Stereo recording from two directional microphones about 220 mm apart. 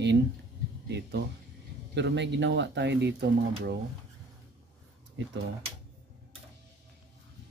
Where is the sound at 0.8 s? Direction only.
50° right (ahead or behind).